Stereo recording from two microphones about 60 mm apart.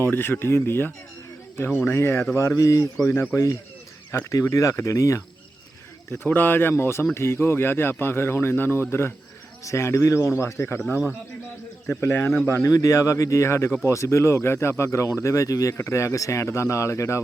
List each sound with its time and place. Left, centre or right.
0.0 s speech: left
6.1 s speech: left
11.9 s speech: left
12.6 s speech: left
15.8 s speech: left